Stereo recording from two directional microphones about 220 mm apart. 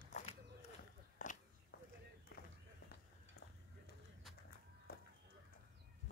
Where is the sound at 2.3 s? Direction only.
40° left (ahead or behind).